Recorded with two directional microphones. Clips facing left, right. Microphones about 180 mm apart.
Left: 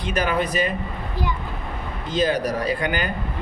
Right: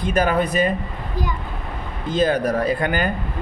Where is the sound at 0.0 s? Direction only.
45° right (ahead or behind).